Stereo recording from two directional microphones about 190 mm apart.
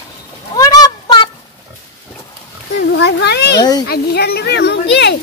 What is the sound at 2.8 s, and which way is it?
A child's voice, 65° left (ahead or behind).